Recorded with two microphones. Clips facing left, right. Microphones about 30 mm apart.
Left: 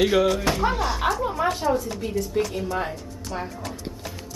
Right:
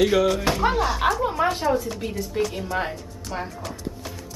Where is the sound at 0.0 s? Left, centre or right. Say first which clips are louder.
Even; centre.